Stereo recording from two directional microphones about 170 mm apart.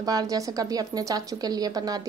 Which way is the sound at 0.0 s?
20° right (ahead or behind).